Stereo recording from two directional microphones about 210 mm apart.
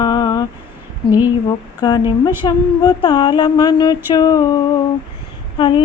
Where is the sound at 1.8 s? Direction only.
20° left (ahead or behind).